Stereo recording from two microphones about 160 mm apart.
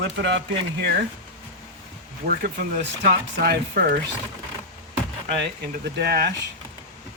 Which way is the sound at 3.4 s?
80° right.